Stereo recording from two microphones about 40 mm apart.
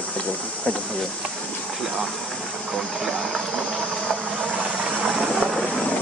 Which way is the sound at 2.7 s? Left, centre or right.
Centre.